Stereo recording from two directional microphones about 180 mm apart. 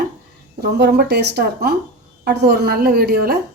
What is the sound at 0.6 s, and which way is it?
A woman's voice, 65° right (ahead or behind).